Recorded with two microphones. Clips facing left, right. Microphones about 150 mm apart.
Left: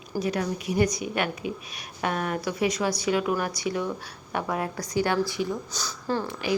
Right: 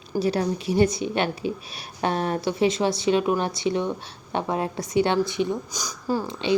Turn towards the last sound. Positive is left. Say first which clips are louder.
# right 2 dB
turn(degrees=-10)  # may be behind; listen again after turning